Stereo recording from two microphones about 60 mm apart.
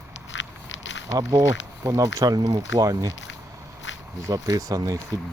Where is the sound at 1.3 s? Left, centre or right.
Right.